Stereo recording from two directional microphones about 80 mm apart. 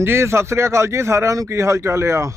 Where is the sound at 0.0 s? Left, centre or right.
Right.